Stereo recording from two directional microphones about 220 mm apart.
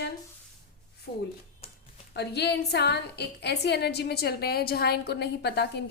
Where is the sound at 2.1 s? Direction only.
50° left (ahead or behind).